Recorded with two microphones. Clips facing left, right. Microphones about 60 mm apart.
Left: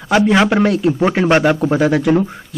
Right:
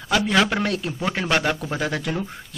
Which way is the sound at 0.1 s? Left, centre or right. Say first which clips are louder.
Left 7 dB; left.